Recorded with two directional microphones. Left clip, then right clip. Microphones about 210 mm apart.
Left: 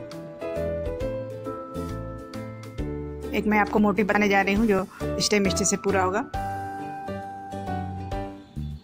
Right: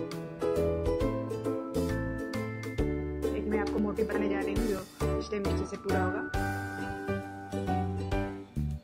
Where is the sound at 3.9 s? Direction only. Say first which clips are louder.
Left 9 dB; 50° left (ahead or behind).